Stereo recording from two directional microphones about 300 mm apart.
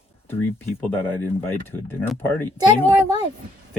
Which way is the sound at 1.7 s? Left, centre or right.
Centre.